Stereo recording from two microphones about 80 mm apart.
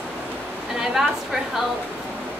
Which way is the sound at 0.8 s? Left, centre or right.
Centre.